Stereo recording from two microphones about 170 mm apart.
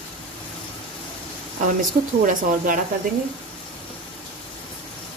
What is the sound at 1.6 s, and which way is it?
Speech, 50° right (ahead or behind).